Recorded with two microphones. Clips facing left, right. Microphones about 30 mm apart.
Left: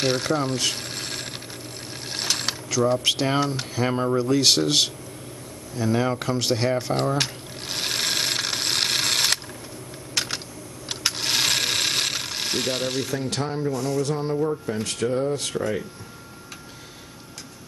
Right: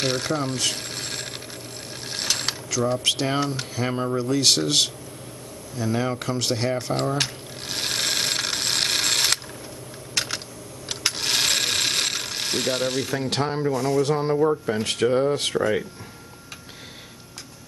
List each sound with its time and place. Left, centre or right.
0.0 s mechanisms: centre
2.1 s speech: centre
5.8 s a sound: centre
10.9 s mechanisms: centre
13.4 s speech: right